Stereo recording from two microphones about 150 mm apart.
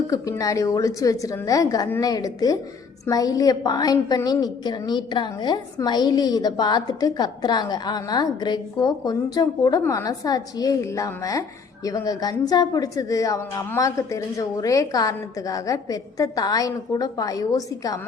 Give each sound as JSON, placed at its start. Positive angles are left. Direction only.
{"t": 0.1, "sound": "a woman's voice", "side_deg": 25}